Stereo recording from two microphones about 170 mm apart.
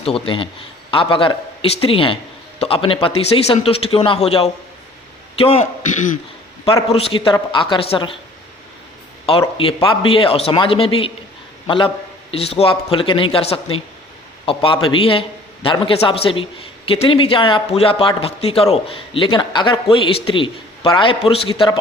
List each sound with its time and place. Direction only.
0.0 s a man's voice: 30° left (ahead or behind)
9.6 s a man's voice: 30° left (ahead or behind)